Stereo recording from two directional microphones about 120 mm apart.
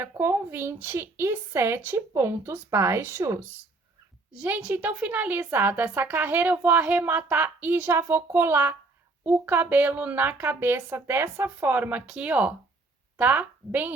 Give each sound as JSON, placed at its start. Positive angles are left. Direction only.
{"t": 0.0, "sound": "a woman's voice", "side_deg": -20}